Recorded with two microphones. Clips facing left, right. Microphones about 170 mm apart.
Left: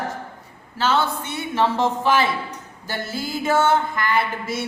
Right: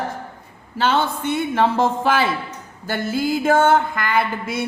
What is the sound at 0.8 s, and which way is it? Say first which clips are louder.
Speech: right 2 dB; 55° right (ahead or behind).